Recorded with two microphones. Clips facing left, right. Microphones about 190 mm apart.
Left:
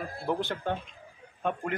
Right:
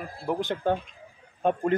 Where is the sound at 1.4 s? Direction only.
35° right (ahead or behind).